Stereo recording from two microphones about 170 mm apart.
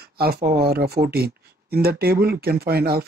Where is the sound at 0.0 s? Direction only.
65° right (ahead or behind).